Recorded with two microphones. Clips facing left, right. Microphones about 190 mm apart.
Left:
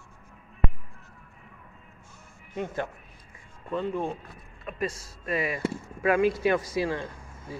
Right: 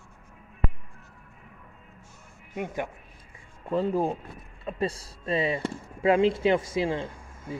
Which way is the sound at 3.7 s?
35° right (ahead or behind).